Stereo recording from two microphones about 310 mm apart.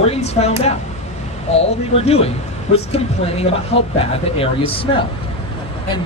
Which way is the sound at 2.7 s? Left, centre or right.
Centre.